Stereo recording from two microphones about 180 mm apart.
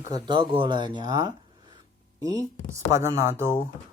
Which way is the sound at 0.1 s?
25° right (ahead or behind).